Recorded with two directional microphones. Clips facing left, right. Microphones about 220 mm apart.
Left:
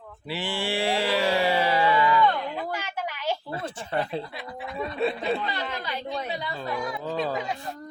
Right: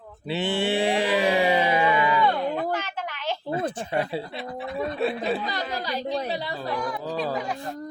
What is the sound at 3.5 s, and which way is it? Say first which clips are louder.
Music: right 5 dB; 20° right (ahead or behind).